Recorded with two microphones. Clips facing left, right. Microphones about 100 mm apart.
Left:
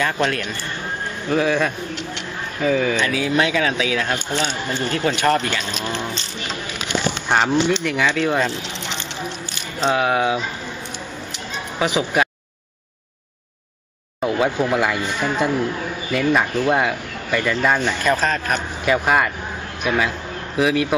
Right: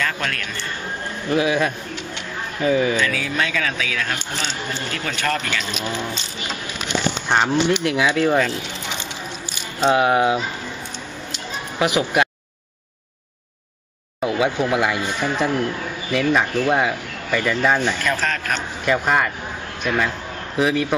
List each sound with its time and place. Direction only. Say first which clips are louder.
0.0 s speech: left 4 dB; 20° left (ahead or behind)
1.3 s speech: even; 5° right (ahead or behind)
3.0 s speech: left 3 dB; 20° left (ahead or behind)
5.6 s speech: even; centre (ahead or behind)
7.2 s speech: left 1 dB; 5° left (ahead or behind)
7.7 s speech: right 1 dB; 10° right (ahead or behind)
9.8 s speech: right 2 dB; 5° right (ahead or behind)
10.1 s speech: right 2 dB; 25° right (ahead or behind)
14.2 s speech: left 1 dB; 5° right (ahead or behind)
18.0 s speech: left 3 dB; 20° left (ahead or behind)
18.9 s a man's voice: left 1 dB; 5° left (ahead or behind)